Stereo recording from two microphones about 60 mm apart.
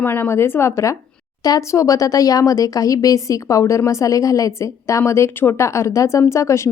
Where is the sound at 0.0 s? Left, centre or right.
Left.